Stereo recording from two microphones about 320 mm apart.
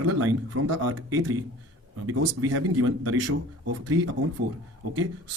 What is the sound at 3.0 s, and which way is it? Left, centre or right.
Speech, right.